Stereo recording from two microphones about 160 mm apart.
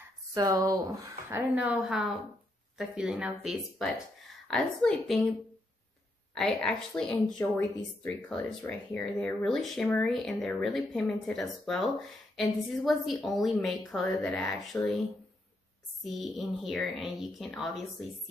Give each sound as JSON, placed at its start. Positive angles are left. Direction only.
{"t": 0.3, "sound": "speech", "side_deg": -25}
{"t": 1.5, "sound": "speech", "side_deg": -5}
{"t": 6.3, "sound": "speech", "side_deg": 5}
{"t": 16.0, "sound": "speech", "side_deg": 0}